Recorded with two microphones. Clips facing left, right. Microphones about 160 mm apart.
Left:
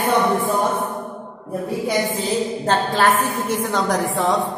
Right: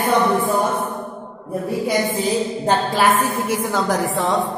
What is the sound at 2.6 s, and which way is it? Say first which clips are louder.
A woman's voice: right 1 dB; 10° right (ahead or behind).